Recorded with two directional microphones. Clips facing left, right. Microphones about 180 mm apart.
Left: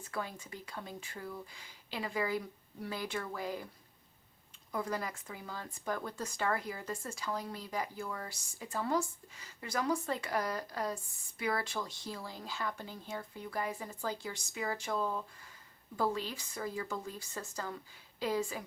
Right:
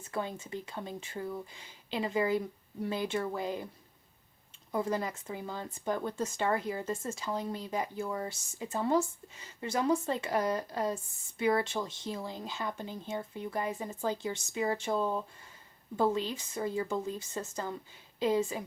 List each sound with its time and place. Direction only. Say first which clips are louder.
0.0 s speech: right 4 dB; 25° right (ahead or behind)
4.7 s speech: right 5 dB; 25° right (ahead or behind)